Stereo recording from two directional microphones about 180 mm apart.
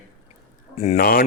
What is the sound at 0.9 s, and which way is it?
Speech, 55° left (ahead or behind).